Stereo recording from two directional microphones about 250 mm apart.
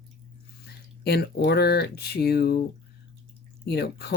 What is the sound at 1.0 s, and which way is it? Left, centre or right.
Speech, left.